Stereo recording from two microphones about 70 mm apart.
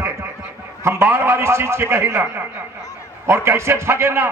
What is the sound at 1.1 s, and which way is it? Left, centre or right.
A man's voice, right.